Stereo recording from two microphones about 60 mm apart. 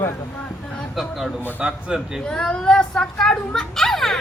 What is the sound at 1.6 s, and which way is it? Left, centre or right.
Speech, centre.